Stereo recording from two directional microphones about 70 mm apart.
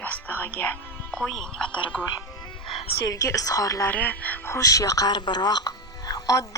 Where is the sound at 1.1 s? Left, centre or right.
Centre.